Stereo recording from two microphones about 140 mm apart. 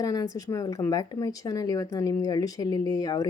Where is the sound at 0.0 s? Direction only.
25° left (ahead or behind).